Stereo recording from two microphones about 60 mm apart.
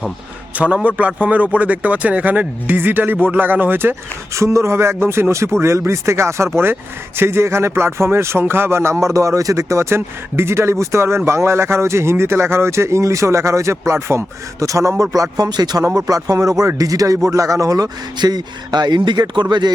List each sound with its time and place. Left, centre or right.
0.5 s a man's voice: right
4.4 s speech: right
15.1 s a man's voice: right